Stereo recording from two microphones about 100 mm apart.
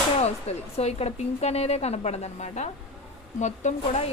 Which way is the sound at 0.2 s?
90° left.